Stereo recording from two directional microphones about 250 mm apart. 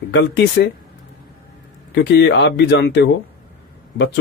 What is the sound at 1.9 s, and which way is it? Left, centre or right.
Speech, left.